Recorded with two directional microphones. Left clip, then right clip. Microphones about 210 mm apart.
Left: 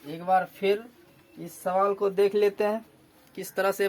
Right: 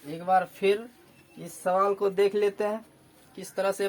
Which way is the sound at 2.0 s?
Centre (ahead or behind).